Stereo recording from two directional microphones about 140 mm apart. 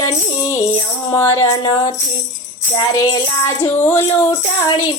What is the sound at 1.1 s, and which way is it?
Music, 20° left (ahead or behind).